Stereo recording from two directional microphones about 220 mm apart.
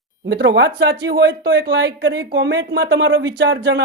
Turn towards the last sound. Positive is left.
turn(degrees=-50)  # may be behind; listen again after turning